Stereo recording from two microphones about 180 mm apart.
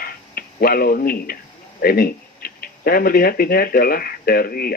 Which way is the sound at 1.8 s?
55° left (ahead or behind).